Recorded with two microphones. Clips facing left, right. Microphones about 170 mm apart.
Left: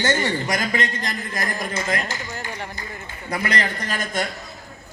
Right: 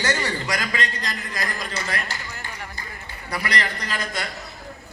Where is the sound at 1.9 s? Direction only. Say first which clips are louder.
Left 4 dB; 20° left (ahead or behind).